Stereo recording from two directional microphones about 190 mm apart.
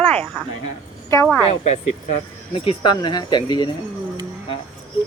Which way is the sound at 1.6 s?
35° left (ahead or behind).